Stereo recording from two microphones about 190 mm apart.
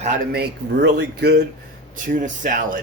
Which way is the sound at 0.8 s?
60° right (ahead or behind).